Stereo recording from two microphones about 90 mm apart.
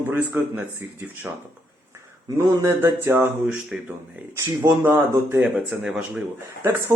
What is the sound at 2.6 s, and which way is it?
Speech, 30° right (ahead or behind).